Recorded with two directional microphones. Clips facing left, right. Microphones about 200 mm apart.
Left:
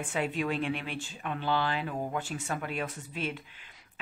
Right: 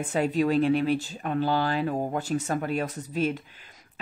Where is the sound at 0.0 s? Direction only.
40° right (ahead or behind).